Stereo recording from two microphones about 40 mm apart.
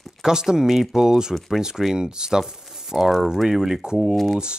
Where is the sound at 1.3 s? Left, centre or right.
Centre.